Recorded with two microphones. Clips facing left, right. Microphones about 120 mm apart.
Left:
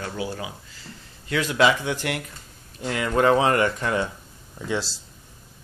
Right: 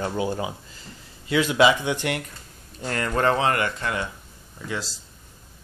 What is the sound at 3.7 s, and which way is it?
Speech, 25° left (ahead or behind).